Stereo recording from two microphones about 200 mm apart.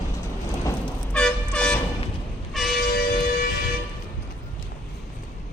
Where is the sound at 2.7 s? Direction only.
45° left (ahead or behind).